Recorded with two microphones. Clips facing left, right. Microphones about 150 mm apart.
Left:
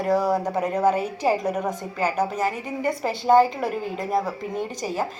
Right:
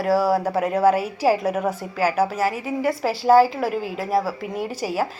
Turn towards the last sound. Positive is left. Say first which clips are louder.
# right 2 dB
turn(degrees=-10)  # may be behind; listen again after turning